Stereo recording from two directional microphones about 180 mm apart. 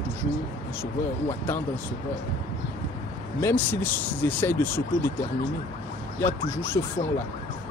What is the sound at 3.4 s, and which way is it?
Speech, 10° left (ahead or behind).